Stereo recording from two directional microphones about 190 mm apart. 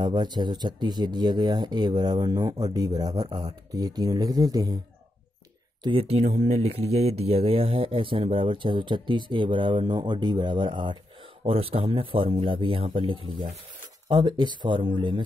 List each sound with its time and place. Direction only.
0.0 s speech: 20° right (ahead or behind)
5.9 s speech: 30° right (ahead or behind)